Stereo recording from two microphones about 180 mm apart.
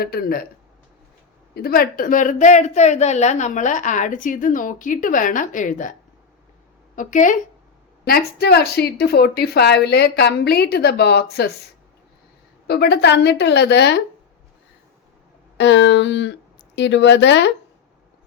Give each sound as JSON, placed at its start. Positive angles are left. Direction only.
{"t": 0.0, "sound": "a woman's voice", "side_deg": 60}
{"t": 1.5, "sound": "a woman's voice", "side_deg": 55}
{"t": 8.0, "sound": "a woman's voice", "side_deg": 60}
{"t": 12.6, "sound": "a woman's voice", "side_deg": 65}
{"t": 15.5, "sound": "a sound", "side_deg": 80}
{"t": 16.7, "sound": "a woman's voice", "side_deg": 75}